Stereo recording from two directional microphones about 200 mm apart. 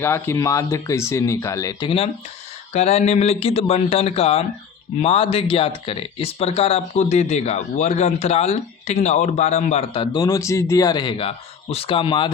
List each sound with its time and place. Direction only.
0.0 s speech: 15° left (ahead or behind)
2.7 s speech: 30° left (ahead or behind)